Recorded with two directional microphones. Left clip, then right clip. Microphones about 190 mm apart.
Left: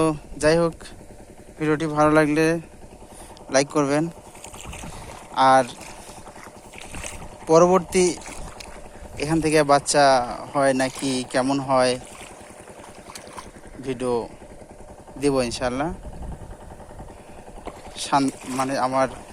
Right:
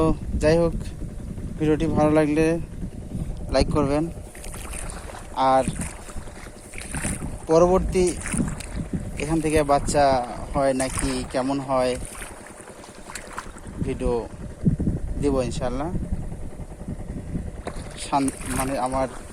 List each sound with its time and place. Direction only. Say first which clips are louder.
0.0 s speech: left 1 dB; centre (ahead or behind)
1.5 s speech: even; 20° right (ahead or behind)
1.9 s speech: left 4 dB; centre (ahead or behind)
5.3 s speech: left 3 dB; 5° left (ahead or behind)
7.0 s boat: right 1 dB; centre (ahead or behind)
9.2 s speech: left 3 dB; 10° left (ahead or behind)
13.8 s speech: left 1 dB; centre (ahead or behind)
17.9 s boat: left 3 dB; 5° left (ahead or behind)
18.6 s speech: left 3 dB; centre (ahead or behind)